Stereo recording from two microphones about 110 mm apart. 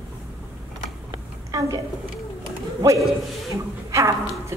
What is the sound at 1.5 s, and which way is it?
Speech, 30° right (ahead or behind).